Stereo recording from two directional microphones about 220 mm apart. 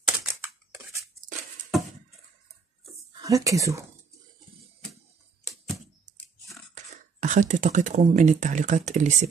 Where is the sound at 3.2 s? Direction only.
15° right (ahead or behind).